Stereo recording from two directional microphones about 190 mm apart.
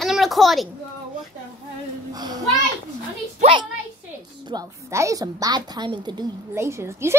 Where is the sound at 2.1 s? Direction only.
20° right (ahead or behind).